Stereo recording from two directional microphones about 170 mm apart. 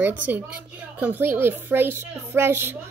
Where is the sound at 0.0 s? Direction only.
10° right (ahead or behind).